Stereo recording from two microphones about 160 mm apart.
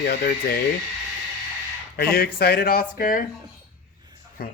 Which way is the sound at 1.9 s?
75° left (ahead or behind).